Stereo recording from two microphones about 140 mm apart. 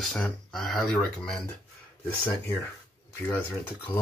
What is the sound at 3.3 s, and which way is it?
Speech, 10° left (ahead or behind).